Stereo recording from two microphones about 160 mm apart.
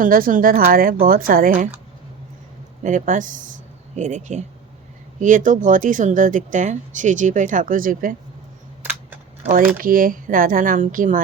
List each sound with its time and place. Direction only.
0.0 s speech: 60° right (ahead or behind)
2.8 s speech: 55° right (ahead or behind)
8.8 s typewriter: 10° right (ahead or behind)
9.7 s speech: 60° right (ahead or behind)